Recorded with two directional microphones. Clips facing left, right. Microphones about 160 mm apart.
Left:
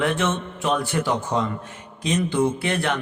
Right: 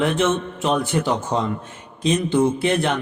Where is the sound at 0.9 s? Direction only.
25° right (ahead or behind).